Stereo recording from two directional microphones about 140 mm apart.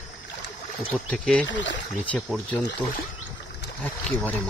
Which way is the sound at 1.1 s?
10° left (ahead or behind).